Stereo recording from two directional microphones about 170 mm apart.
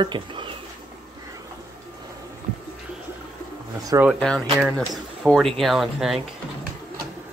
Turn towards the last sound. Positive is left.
turn(degrees=0)  # may be behind; listen again after turning